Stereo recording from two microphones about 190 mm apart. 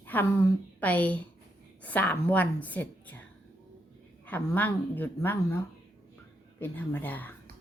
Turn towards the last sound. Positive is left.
turn(degrees=10)  # may be behind; listen again after turning